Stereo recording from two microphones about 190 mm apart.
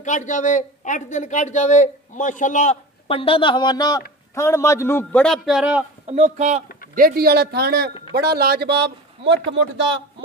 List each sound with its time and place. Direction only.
0.0 s a man's voice: 40° left (ahead or behind); by 5.9 s 5° right (ahead or behind)
6.0 s speech: 35° right (ahead or behind)
7.0 s a man's voice: 50° right (ahead or behind); by 9.9 s 70° right (ahead or behind)